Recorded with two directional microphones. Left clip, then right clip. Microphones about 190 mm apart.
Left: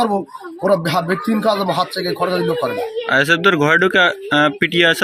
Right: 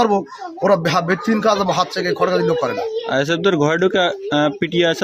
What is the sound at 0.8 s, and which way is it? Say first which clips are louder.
Speech: right 1 dB; 25° right (ahead or behind).